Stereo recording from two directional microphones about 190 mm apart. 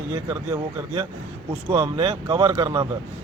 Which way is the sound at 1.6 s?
30° right (ahead or behind).